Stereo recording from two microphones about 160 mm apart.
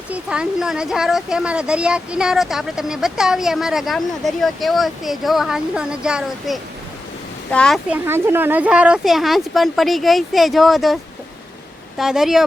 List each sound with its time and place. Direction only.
0.1 s speech: 5° right (ahead or behind)
7.9 s speech: 10° right (ahead or behind)
11.9 s speech: centre (ahead or behind)